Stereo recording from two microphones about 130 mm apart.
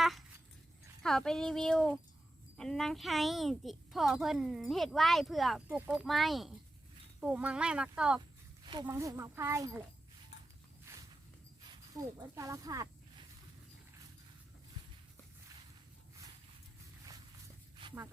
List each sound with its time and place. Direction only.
1.0 s a child's voice: 5° left (ahead or behind)
8.6 s a sound: 35° right (ahead or behind)
8.9 s speech: 20° right (ahead or behind)
10.9 s walk: 20° right (ahead or behind)
12.2 s speech: 25° right (ahead or behind)